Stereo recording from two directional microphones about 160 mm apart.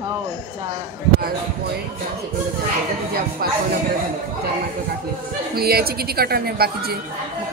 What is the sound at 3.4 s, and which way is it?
Speech, 70° right (ahead or behind).